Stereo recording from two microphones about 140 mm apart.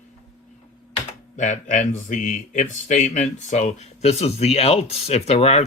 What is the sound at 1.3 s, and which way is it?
Speech, 60° left (ahead or behind).